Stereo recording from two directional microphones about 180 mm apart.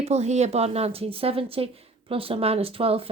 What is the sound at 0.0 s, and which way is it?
Speech, 35° right (ahead or behind).